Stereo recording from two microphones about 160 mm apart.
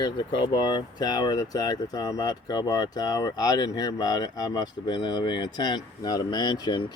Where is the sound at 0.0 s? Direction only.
30° left (ahead or behind).